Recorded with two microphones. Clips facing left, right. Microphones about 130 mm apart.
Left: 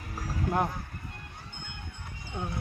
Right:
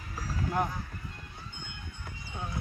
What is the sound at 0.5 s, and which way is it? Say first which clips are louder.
Run: left 2 dB; 60° left (ahead or behind).